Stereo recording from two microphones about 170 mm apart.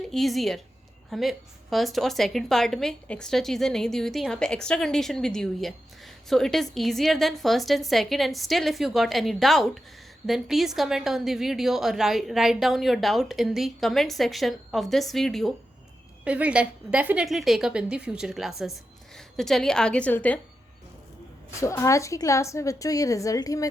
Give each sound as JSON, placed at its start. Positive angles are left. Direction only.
{"t": 0.1, "sound": "a woman's voice", "side_deg": 0}
{"t": 21.6, "sound": "a woman's voice", "side_deg": 15}